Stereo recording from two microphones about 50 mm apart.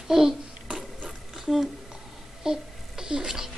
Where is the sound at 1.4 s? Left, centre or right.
Centre.